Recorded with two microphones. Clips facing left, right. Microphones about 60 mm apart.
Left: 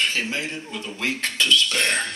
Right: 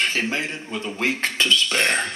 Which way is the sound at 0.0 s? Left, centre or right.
Right.